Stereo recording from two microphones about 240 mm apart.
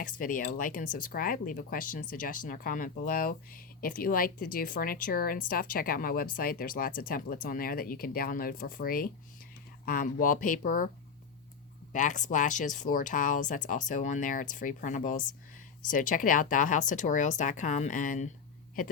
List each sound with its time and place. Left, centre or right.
0.0 s speech: left
11.9 s speech: left